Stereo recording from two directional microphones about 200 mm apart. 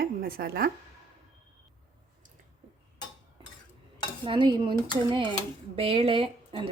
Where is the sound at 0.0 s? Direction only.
50° right (ahead or behind).